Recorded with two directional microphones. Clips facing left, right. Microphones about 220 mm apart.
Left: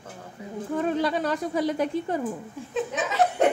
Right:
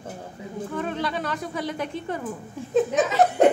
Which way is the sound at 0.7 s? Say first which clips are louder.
Left 4 dB; 35° left (ahead or behind).